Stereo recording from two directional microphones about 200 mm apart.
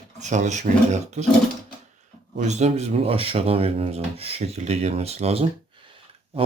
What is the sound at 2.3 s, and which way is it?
Speech, 35° right (ahead or behind).